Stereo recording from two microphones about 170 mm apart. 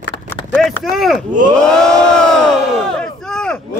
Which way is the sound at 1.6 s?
5° left (ahead or behind).